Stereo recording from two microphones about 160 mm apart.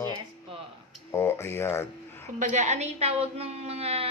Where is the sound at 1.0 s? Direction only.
15° left (ahead or behind).